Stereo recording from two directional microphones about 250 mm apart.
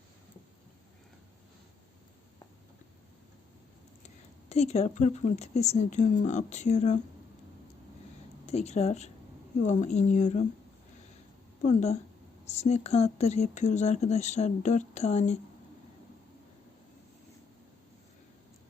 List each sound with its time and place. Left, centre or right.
4.0 s speech: left
8.4 s speech: left
11.6 s speech: left